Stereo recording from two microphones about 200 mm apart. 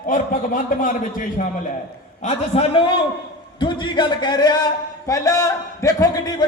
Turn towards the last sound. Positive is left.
turn(degrees=15)  # may be behind; listen again after turning